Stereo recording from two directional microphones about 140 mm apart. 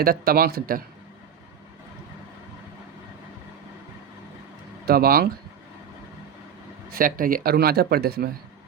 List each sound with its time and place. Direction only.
0.0 s speech: 90° right
4.9 s speech: 90° right
6.9 s speech: 85° right